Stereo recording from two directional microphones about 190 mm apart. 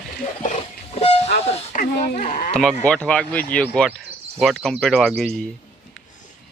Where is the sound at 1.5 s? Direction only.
35° left (ahead or behind).